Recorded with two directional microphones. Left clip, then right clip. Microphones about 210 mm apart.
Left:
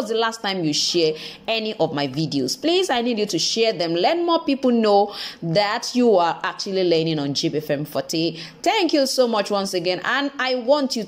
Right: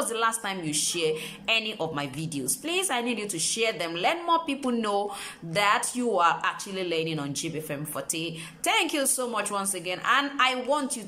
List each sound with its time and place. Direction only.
0.1 s a woman's voice: 20° left (ahead or behind)